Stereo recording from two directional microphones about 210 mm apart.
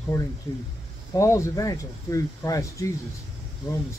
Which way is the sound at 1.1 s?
15° left (ahead or behind).